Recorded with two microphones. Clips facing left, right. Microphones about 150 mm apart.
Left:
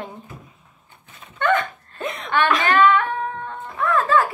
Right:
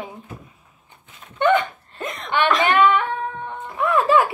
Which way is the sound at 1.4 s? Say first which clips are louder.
Right 3 dB; 20° right (ahead or behind).